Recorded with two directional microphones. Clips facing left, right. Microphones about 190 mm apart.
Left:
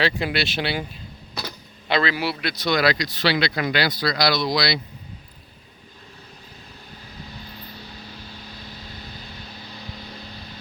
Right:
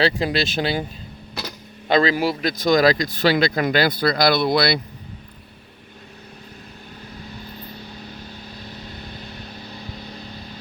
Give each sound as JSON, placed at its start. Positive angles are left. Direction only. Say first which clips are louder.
{"t": 0.0, "sound": "speech", "louder": "right 3 dB", "side_deg": -35}
{"t": 1.9, "sound": "speech", "louder": "right 5 dB", "side_deg": -45}